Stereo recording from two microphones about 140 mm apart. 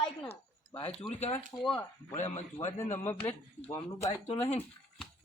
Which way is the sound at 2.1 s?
55° left (ahead or behind).